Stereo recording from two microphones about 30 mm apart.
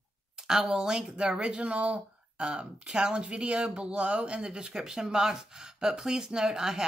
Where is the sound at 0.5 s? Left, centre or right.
Right.